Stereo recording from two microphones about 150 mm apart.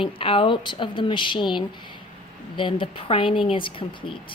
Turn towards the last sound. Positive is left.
turn(degrees=35)  # may be behind; listen again after turning